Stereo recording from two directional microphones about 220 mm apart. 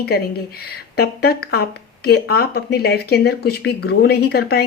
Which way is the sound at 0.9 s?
45° left (ahead or behind).